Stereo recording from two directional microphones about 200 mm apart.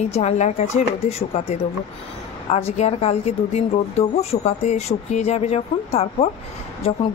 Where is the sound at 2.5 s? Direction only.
30° left (ahead or behind).